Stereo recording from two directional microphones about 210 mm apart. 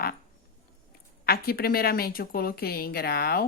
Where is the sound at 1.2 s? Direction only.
45° left (ahead or behind).